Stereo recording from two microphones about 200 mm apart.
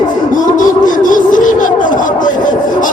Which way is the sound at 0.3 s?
40° left (ahead or behind).